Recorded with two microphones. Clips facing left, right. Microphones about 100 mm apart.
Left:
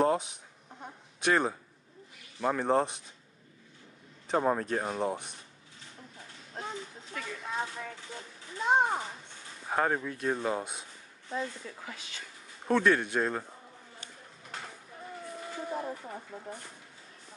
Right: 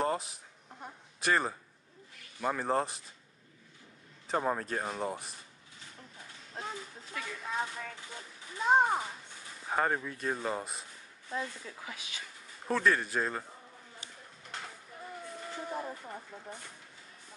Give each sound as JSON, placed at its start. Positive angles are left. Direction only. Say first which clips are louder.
{"t": 0.0, "sound": "a sound", "louder": "left 5 dB", "side_deg": 0}
{"t": 2.4, "sound": "speech", "louder": "left 4 dB", "side_deg": 0}
{"t": 4.3, "sound": "speech", "louder": "left 4 dB", "side_deg": 0}
{"t": 6.5, "sound": "a sound", "louder": "left 2 dB", "side_deg": 0}
{"t": 8.5, "sound": "speech", "louder": "even", "side_deg": 0}
{"t": 11.2, "sound": "speech", "louder": "left 2 dB", "side_deg": 15}
{"t": 11.6, "sound": "speech", "louder": "left 1 dB", "side_deg": -5}
{"t": 15.2, "sound": "speech", "louder": "left 3 dB", "side_deg": 5}